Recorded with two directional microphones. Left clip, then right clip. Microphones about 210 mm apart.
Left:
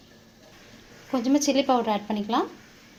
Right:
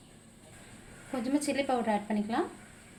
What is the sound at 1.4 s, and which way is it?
A woman's voice, 30° left (ahead or behind).